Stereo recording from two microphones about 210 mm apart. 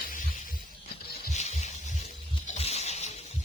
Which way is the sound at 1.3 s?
30° left (ahead or behind).